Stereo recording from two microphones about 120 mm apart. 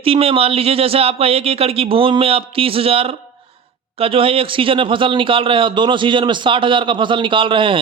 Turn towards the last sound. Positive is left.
turn(degrees=-45)  # may be behind; listen again after turning